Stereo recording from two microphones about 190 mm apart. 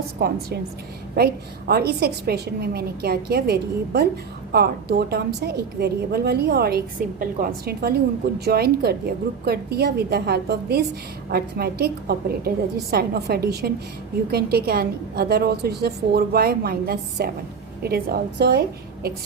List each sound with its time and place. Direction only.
1.1 s a woman's voice: 55° right (ahead or behind)